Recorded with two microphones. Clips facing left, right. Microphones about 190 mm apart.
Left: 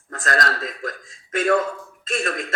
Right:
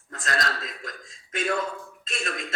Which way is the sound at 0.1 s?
50° left (ahead or behind).